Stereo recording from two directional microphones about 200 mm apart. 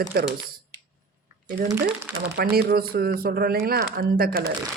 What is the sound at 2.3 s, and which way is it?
Speech, 50° right (ahead or behind).